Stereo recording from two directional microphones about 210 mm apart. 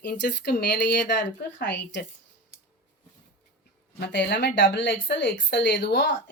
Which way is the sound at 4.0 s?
55° left (ahead or behind).